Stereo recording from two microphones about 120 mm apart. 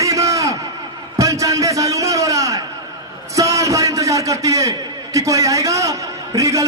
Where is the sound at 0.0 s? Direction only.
25° right (ahead or behind).